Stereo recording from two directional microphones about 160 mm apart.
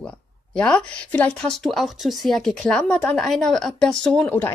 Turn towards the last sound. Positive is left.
turn(degrees=10)  # may be behind; listen again after turning